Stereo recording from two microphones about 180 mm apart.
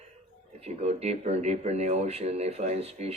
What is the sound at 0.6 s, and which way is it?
Speech, 35° right (ahead or behind).